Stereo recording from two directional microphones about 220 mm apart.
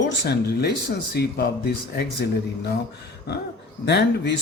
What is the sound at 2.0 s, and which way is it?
Speech, 50° left (ahead or behind).